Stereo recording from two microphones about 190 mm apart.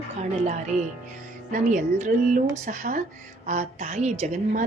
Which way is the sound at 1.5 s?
40° right (ahead or behind).